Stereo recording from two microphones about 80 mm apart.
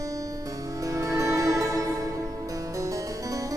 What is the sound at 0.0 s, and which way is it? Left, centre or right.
Music, right.